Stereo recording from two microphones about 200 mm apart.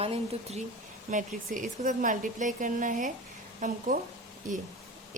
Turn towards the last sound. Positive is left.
turn(degrees=-40)  # may be behind; listen again after turning